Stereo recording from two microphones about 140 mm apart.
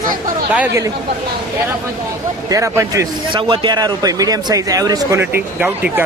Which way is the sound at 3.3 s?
35° right (ahead or behind).